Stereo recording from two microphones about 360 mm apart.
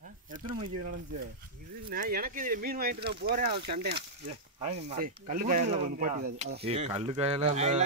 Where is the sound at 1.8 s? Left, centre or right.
Right.